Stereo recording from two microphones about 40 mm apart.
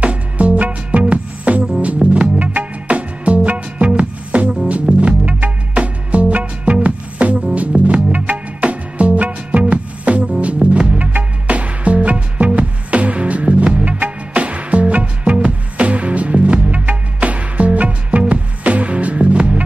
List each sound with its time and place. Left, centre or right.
0.0 s music: right
14.3 s music: right